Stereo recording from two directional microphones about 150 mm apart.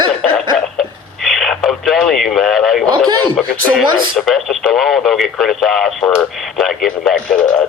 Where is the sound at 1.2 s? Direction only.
Centre (ahead or behind).